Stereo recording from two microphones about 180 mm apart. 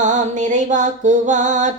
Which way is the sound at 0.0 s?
40° right (ahead or behind).